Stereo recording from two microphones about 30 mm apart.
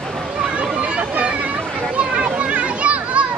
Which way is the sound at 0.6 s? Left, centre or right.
Right.